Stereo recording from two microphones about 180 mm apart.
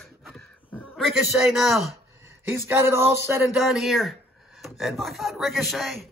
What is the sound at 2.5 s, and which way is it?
Speech, 15° right (ahead or behind).